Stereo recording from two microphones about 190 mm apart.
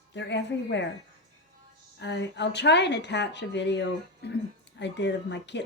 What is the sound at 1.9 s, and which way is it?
Speech, 65° left (ahead or behind).